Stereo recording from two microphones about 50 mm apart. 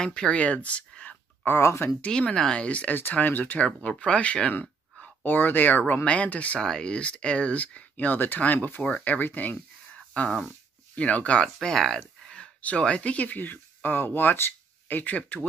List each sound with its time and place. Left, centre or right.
0.0 s speech: centre
2.6 s speech: left
3.0 s speech: left
3.5 s speech: left
5.2 s speech: left
6.6 s speech: centre; by 9.6 s left
9.9 s a sound: centre
11.0 s speech: left; by 12.0 s centre
12.0 s a sound: centre
12.6 s speech: left